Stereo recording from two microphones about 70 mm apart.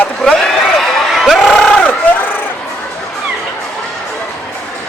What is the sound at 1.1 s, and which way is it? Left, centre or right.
Crowd, centre.